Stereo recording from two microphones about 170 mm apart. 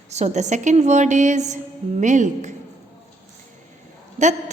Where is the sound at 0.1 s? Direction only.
40° right (ahead or behind).